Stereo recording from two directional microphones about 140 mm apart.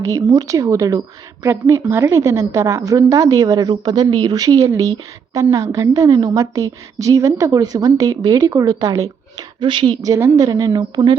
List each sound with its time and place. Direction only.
0.0 s a woman's voice: 20° right (ahead or behind)
10.0 s a woman's voice: 20° right (ahead or behind)